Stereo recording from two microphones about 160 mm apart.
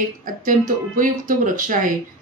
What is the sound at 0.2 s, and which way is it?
Speech, 60° right (ahead or behind).